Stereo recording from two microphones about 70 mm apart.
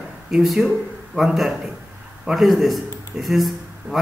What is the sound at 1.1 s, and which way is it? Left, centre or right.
A man's voice, centre.